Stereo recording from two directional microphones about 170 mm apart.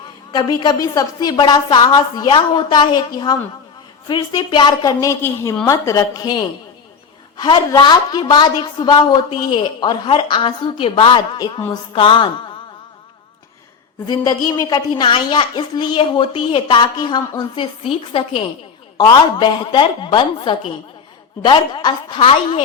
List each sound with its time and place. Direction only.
0.3 s a woman's voice: 25° left (ahead or behind)
7.4 s a woman's voice: 25° left (ahead or behind)
14.1 s a woman's voice: 25° left (ahead or behind)